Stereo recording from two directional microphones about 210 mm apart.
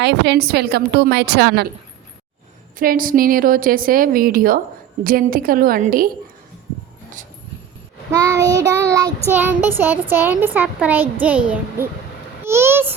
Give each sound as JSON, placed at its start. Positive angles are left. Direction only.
{"t": 0.0, "sound": "a woman's voice", "side_deg": -55}
{"t": 2.7, "sound": "a woman's voice", "side_deg": -40}
{"t": 8.1, "sound": "child singing", "side_deg": -15}
{"t": 12.5, "sound": "a child's voice", "side_deg": -10}